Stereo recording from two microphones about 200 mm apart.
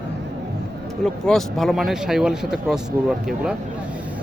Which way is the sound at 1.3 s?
Centre (ahead or behind).